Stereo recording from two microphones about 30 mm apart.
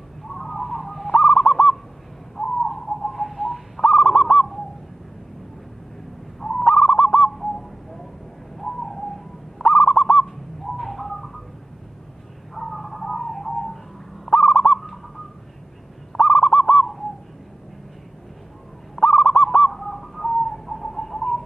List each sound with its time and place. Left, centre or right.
0.3 s bird: centre
1.2 s owl: centre
3.8 s bird: centre
6.7 s owl: left
8.5 s bird: centre
9.7 s owl: left
10.8 s bird: centre
12.5 s a sound: centre
14.4 s owl: centre
16.1 s owl: centre
19.0 s owl: left
19.3 s owl: centre
19.7 s bird: centre